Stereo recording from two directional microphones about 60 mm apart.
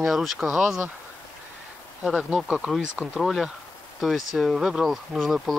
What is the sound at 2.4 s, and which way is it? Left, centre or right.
Speech, centre.